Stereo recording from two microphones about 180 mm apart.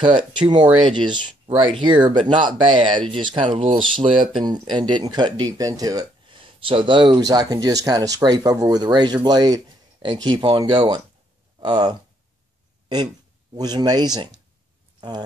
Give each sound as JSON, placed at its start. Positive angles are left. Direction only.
{"t": 0.3, "sound": "speech", "side_deg": -25}
{"t": 12.8, "sound": "a sound", "side_deg": -25}
{"t": 13.6, "sound": "speech", "side_deg": -20}